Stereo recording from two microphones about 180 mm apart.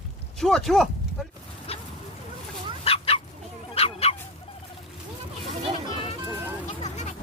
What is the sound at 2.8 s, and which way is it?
Dog, 30° left (ahead or behind).